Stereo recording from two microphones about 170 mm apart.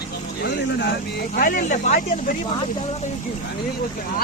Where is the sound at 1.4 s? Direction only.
55° left (ahead or behind).